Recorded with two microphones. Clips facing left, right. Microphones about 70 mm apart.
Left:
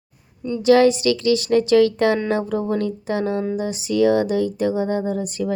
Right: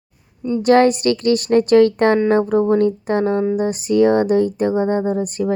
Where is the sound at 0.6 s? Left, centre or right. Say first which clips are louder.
Right 1 dB; right.